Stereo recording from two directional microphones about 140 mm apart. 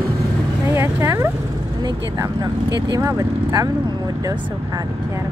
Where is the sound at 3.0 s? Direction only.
20° right (ahead or behind).